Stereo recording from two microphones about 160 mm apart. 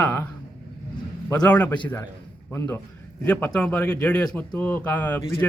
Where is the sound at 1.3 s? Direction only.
5° left (ahead or behind).